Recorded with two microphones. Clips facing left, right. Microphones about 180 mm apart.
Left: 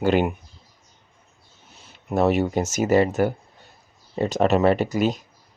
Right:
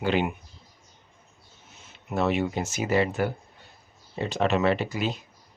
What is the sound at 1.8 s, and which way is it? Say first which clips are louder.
Speech: left 6 dB; 35° left (ahead or behind).